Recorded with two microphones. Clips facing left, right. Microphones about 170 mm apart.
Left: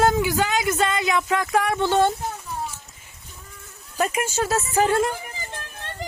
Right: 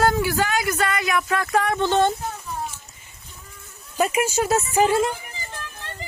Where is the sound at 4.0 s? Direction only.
10° right (ahead or behind).